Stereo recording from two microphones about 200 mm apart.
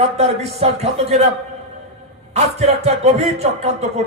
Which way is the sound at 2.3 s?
35° right (ahead or behind).